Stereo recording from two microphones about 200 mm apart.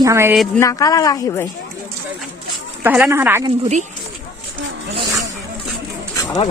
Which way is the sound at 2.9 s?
10° right (ahead or behind).